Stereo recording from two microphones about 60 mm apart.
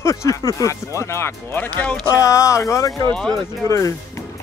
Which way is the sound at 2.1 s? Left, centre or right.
Left.